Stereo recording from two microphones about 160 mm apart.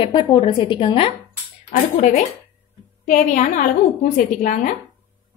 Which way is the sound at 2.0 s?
50° left (ahead or behind).